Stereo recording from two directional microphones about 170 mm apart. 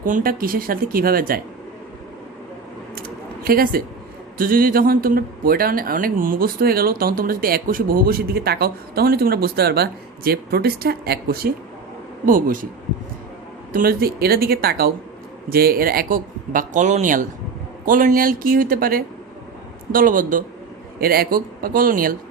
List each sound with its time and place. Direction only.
0.0 s speech: 55° right (ahead or behind)
2.9 s a sound: 60° right (ahead or behind)
4.4 s speech: 55° right (ahead or behind)
12.2 s speech: 55° right (ahead or behind)
13.7 s speech: 60° right (ahead or behind)
21.0 s speech: 65° right (ahead or behind)